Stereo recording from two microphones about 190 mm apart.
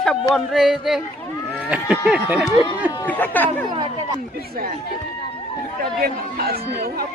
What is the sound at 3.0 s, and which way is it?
Speech, 10° left (ahead or behind).